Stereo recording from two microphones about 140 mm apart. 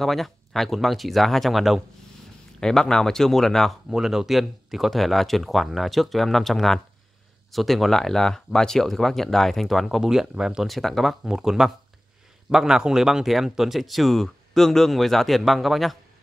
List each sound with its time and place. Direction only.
0.0 s speech: centre (ahead or behind)